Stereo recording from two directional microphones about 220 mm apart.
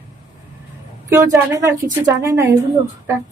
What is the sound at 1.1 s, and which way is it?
A woman's voice, 15° right (ahead or behind).